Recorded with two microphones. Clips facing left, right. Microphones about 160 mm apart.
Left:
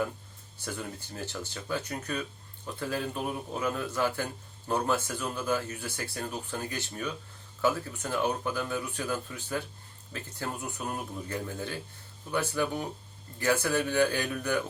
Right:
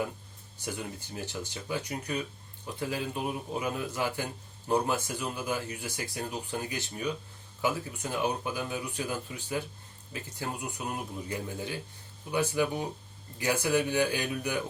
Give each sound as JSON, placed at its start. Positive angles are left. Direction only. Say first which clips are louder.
{"t": 0.6, "sound": "speech", "louder": "even", "side_deg": -15}